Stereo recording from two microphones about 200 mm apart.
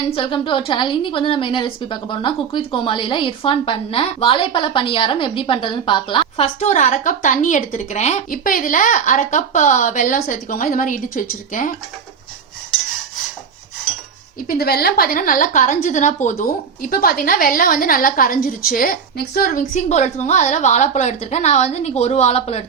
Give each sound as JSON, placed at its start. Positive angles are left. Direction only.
{"t": 0.1, "sound": "a woman's voice", "side_deg": 25}
{"t": 14.4, "sound": "a woman's voice", "side_deg": 50}